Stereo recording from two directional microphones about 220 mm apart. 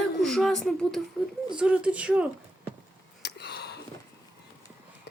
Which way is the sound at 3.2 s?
50° left (ahead or behind).